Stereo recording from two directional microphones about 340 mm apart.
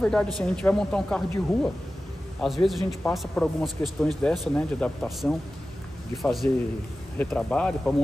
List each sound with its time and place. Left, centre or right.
0.0 s speech: centre